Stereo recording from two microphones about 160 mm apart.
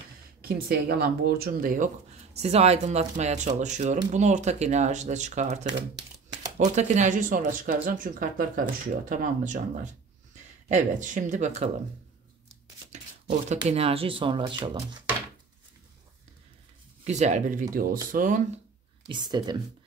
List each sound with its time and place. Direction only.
0.4 s speech: 70° right (ahead or behind)
2.3 s speech: 40° right (ahead or behind)
10.7 s speech: 55° right (ahead or behind)
12.9 s shuffling cards: 45° right (ahead or behind)
13.7 s speech: 40° right (ahead or behind)
17.0 s speech: 45° right (ahead or behind)
19.0 s speech: 25° right (ahead or behind)